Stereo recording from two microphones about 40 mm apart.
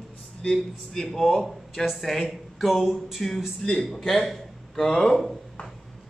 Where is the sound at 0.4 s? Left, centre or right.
Centre.